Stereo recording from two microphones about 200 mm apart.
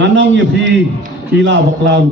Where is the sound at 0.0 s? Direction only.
65° right (ahead or behind).